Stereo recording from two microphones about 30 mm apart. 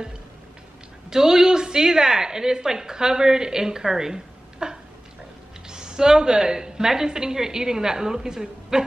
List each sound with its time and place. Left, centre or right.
1.1 s a woman's voice: centre